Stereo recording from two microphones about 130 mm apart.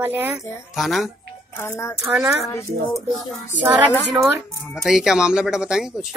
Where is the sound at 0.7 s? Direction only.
Centre (ahead or behind).